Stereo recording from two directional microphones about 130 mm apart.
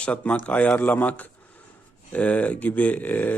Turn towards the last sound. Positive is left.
turn(degrees=15)  # may be behind; listen again after turning